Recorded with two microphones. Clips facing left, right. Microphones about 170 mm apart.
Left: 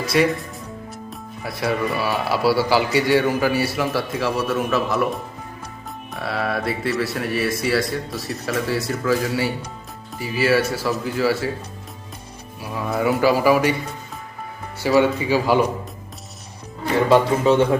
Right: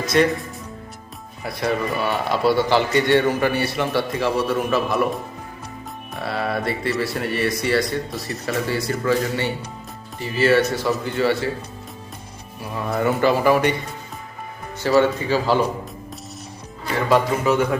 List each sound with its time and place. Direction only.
0.1 s speech: 5° left (ahead or behind)
1.5 s a man's voice: 5° left (ahead or behind)
6.1 s a man's voice: centre (ahead or behind)
12.7 s a man's voice: centre (ahead or behind)
14.8 s speech: 15° left (ahead or behind)
17.1 s a man's voice: 25° left (ahead or behind)